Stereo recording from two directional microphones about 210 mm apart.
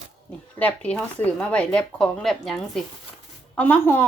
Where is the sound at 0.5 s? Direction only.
5° left (ahead or behind).